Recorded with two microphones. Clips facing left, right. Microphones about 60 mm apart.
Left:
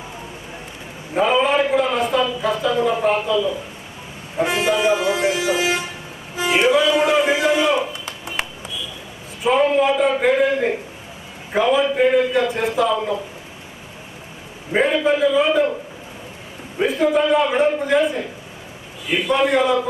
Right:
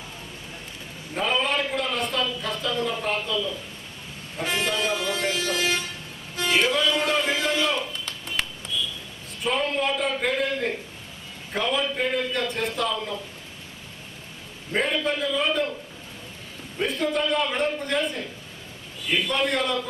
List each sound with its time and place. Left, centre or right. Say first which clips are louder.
1.1 s a sound: left 8 dB; centre
4.4 s vehicle: left 8 dB; centre
6.3 s a sound: left 6 dB; centre
9.4 s a man's voice: left 9 dB; centre
14.7 s a man's voice: left 8 dB; centre
16.7 s a man's voice: left 8 dB; centre